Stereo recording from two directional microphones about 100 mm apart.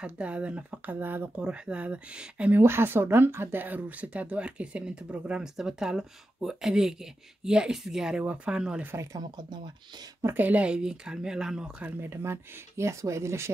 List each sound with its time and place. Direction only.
0.0 s speech: 10° right (ahead or behind)
2.6 s speech: 25° right (ahead or behind)
8.9 s speech: 35° right (ahead or behind)
10.2 s speech: 20° right (ahead or behind)
11.8 s speech: 25° right (ahead or behind)